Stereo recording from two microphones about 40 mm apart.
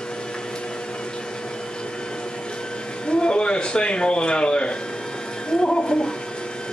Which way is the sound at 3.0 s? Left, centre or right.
Left.